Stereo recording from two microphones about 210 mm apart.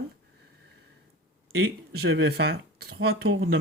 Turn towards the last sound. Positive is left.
turn(degrees=-50)  # may be behind; listen again after turning